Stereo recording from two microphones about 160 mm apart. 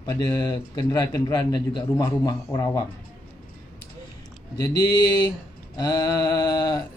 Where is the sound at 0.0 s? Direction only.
25° left (ahead or behind).